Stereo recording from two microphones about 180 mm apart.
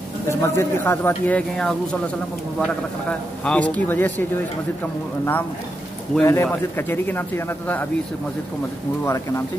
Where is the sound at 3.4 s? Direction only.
5° left (ahead or behind).